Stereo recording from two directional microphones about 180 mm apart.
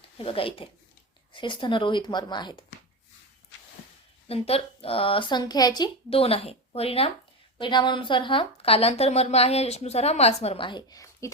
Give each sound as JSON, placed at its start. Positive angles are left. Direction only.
{"t": 0.2, "sound": "a woman's voice", "side_deg": 30}
{"t": 4.3, "sound": "a woman's voice", "side_deg": 35}